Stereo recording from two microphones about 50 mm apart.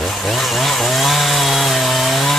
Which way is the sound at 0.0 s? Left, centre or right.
Centre.